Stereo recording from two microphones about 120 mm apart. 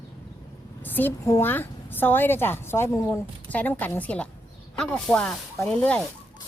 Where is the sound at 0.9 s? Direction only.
15° left (ahead or behind).